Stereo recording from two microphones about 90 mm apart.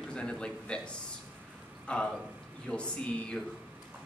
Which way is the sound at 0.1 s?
10° left (ahead or behind).